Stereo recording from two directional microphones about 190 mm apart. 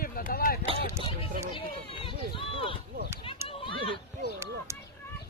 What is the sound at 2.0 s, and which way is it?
Speech, 30° left (ahead or behind).